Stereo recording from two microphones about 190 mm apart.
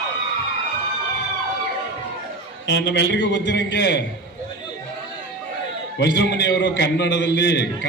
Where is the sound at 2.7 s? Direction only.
65° left (ahead or behind).